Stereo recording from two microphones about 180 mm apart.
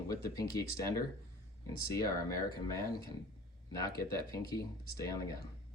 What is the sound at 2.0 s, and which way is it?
Speech, 20° left (ahead or behind).